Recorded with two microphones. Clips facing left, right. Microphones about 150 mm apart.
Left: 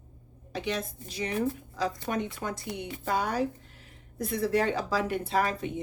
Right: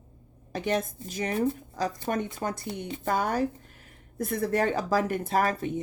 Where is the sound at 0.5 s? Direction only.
50° right (ahead or behind).